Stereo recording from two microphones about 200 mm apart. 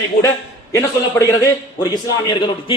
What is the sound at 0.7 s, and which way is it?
A man's voice, 15° left (ahead or behind).